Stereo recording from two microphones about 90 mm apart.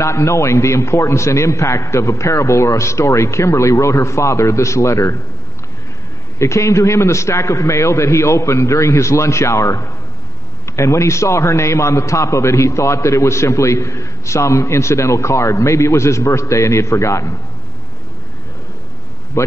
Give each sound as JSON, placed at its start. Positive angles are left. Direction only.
{"t": 0.0, "sound": "a man's voice", "side_deg": 35}
{"t": 6.3, "sound": "a man's voice", "side_deg": 35}
{"t": 19.3, "sound": "a sound", "side_deg": 30}